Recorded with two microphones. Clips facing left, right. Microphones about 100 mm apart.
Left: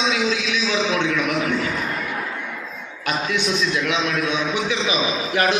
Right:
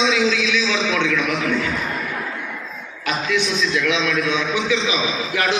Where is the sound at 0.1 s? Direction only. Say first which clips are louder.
Right 3 dB; 35° left (ahead or behind).